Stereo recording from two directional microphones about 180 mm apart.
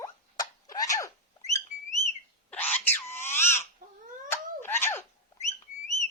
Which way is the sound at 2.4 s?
10° left (ahead or behind).